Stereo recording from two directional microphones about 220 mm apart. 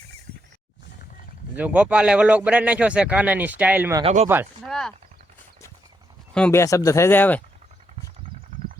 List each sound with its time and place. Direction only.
1.5 s speech: 5° right (ahead or behind)
4.0 s speech: 30° right (ahead or behind)
4.6 s speech: centre (ahead or behind)
6.3 s speech: 10° left (ahead or behind)